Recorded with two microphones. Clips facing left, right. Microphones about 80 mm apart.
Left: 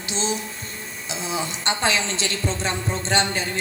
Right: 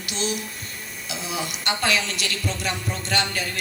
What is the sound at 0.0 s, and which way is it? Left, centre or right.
A woman's voice, left.